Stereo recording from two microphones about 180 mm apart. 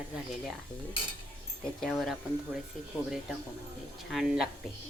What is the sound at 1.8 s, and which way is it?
Speech, centre (ahead or behind).